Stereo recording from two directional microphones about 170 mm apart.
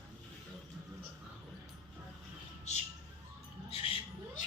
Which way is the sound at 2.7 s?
40° left (ahead or behind).